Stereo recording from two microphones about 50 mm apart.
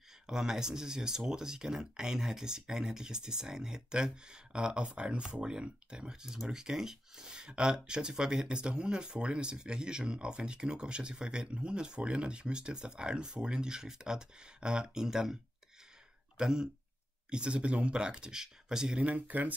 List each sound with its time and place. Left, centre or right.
0.3 s speech: centre
16.3 s speech: centre
19.0 s speech: right